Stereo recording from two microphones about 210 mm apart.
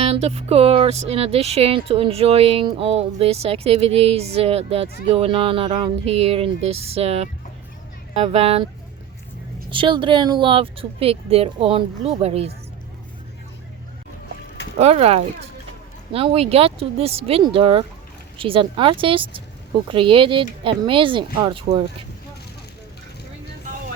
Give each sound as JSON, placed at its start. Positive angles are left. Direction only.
{"t": 0.0, "sound": "speech", "side_deg": -30}
{"t": 9.6, "sound": "speech", "side_deg": -25}
{"t": 14.8, "sound": "speech", "side_deg": -30}